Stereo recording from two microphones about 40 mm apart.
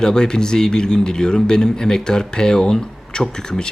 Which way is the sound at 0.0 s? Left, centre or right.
Centre.